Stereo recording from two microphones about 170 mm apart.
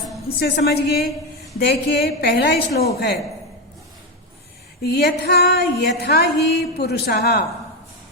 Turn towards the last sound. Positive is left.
turn(degrees=70)  # may be behind; listen again after turning